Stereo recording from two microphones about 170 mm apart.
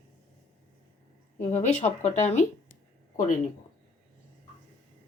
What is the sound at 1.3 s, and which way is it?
Speech, 40° left (ahead or behind).